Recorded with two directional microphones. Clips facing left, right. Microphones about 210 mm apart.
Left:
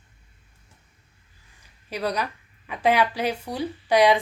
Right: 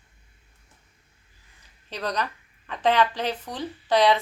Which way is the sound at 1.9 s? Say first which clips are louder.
Left 2 dB; 10° left (ahead or behind).